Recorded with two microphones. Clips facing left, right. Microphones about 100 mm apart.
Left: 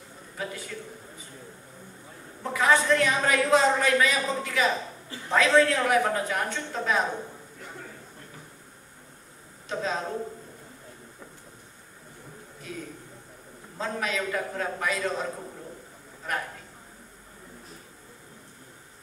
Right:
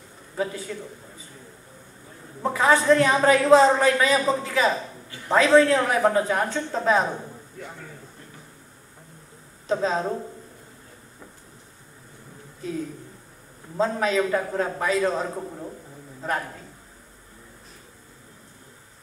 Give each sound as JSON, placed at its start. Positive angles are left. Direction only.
{"t": 0.4, "sound": "a woman's voice", "side_deg": -30}
{"t": 2.4, "sound": "a woman's voice", "side_deg": -30}
{"t": 9.7, "sound": "a woman's voice", "side_deg": -35}
{"t": 13.7, "sound": "a woman's voice", "side_deg": -30}
{"t": 16.2, "sound": "a man's voice", "side_deg": -35}